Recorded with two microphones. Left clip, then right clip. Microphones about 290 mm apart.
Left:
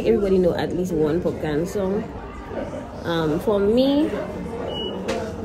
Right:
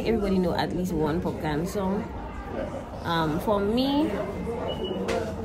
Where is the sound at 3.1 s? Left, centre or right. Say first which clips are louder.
Left 4 dB; centre.